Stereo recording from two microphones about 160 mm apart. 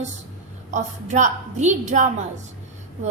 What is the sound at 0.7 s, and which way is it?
A woman's voice, 50° right (ahead or behind).